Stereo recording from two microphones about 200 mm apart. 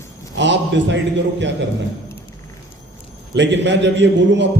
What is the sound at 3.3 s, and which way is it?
A man's voice, 60° right (ahead or behind).